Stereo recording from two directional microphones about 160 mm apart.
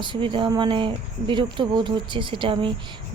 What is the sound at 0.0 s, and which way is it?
A woman's voice, 30° right (ahead or behind).